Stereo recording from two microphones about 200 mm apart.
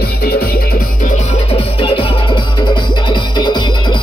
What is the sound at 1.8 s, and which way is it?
Music, 25° left (ahead or behind).